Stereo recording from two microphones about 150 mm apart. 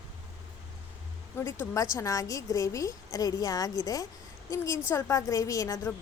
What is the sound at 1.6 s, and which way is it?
A woman's voice, 20° left (ahead or behind).